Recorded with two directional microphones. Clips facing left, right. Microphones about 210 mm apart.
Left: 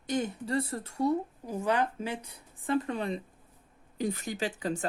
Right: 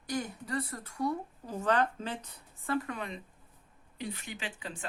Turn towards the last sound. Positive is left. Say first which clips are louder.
# left 10 dB
turn(degrees=40)  # may be behind; listen again after turning